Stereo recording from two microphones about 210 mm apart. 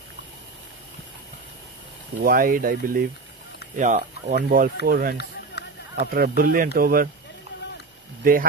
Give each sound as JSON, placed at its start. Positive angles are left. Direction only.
{"t": 2.2, "sound": "speech", "side_deg": -45}
{"t": 8.2, "sound": "speech", "side_deg": -40}